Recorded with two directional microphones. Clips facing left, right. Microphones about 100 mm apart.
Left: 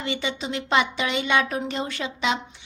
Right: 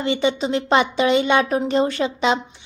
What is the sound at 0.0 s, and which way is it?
A woman's voice, 30° right (ahead or behind).